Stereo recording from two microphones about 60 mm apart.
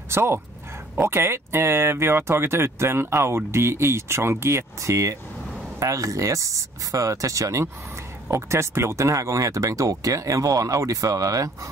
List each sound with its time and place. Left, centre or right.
0.1 s speech: right
8.3 s speech: right